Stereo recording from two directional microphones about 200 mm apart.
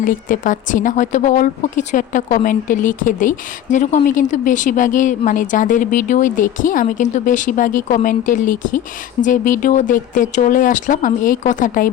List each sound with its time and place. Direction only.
0.0 s speech: 40° left (ahead or behind)